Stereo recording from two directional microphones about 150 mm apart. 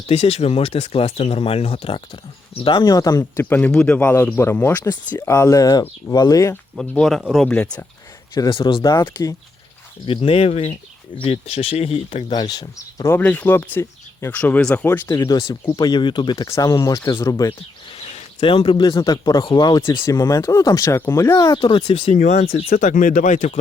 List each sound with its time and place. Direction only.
0.1 s speech: 45° left (ahead or behind); by 3.4 s 25° left (ahead or behind)
3.5 s speech: 5° left (ahead or behind)
6.7 s speech: 5° left (ahead or behind)
7.4 s speech: 10° left (ahead or behind)
8.4 s speech: 35° left (ahead or behind)
8.8 s speech: 20° left (ahead or behind)
10.1 s speech: 40° left (ahead or behind)
13.1 s speech: 10° left (ahead or behind)
17.9 s a sound: 40° left (ahead or behind)
18.9 s speech: 25° left (ahead or behind)
22.1 s speech: 55° left (ahead or behind)